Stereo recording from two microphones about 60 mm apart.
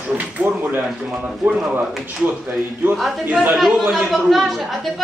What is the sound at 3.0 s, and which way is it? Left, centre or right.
Speech, centre.